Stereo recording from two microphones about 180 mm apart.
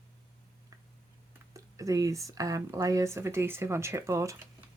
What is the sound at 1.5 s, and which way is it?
Speech, 20° right (ahead or behind).